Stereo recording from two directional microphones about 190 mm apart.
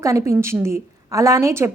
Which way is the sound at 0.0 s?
15° right (ahead or behind).